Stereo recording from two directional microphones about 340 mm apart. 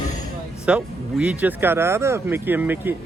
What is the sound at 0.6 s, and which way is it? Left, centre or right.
Speech, centre.